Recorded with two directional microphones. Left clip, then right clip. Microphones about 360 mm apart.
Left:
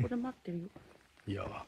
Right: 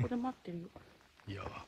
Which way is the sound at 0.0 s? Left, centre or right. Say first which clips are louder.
Even; right.